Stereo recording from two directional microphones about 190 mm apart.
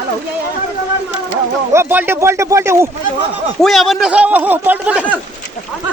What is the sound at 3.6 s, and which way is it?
Speech, centre (ahead or behind).